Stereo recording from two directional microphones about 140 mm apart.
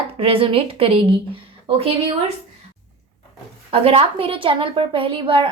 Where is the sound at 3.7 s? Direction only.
45° right (ahead or behind).